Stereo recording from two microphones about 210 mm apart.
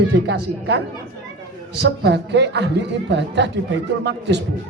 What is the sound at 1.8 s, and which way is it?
A woman's voice, 55° right (ahead or behind).